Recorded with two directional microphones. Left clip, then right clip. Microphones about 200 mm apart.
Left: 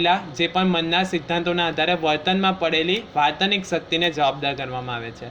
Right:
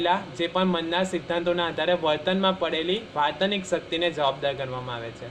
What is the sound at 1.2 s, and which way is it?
Speech, 40° left (ahead or behind).